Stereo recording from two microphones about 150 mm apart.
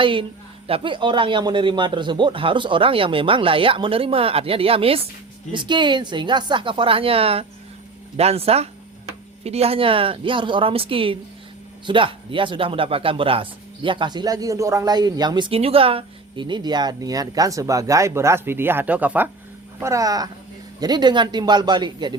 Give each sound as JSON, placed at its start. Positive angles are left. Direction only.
{"t": 0.0, "sound": "speech", "side_deg": -35}